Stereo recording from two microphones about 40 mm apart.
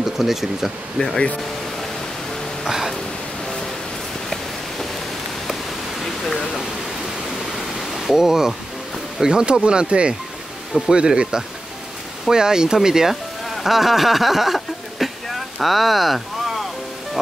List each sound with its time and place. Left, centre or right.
0.0 s speech: centre
0.9 s speech: centre
2.6 s music: centre
7.5 s pink noise: centre
8.0 s speech: centre